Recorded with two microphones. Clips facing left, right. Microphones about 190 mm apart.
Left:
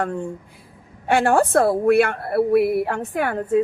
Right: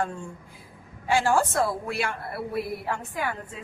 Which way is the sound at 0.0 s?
65° left (ahead or behind).